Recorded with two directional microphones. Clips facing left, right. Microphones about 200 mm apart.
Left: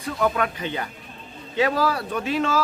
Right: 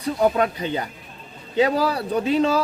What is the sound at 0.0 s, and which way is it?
A man's voice, 30° right (ahead or behind).